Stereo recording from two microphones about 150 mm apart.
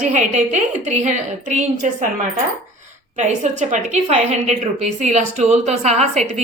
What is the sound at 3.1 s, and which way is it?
A woman's voice, 55° right (ahead or behind).